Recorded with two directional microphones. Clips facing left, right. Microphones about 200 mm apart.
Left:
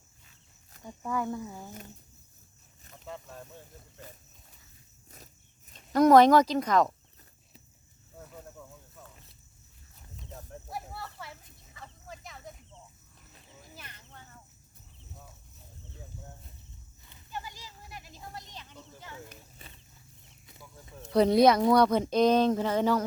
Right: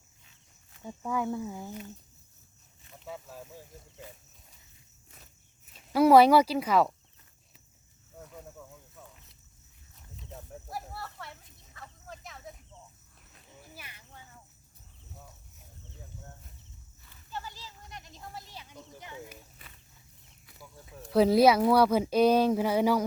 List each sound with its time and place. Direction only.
0.9 s speech: 10° right (ahead or behind)
3.1 s speech: 5° right (ahead or behind)
5.1 s insect: 40° left (ahead or behind)
5.7 s speech: 5° right (ahead or behind)
10.7 s snake: centre (ahead or behind)
13.7 s cricket: 10° right (ahead or behind)
17.1 s snake: 15° left (ahead or behind); by 19.4 s 15° right (ahead or behind)
19.6 s wild animals: 25° left (ahead or behind)
20.6 s speech: 5° right (ahead or behind)